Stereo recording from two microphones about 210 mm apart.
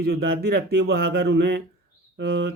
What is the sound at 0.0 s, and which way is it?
Speech, 50° right (ahead or behind).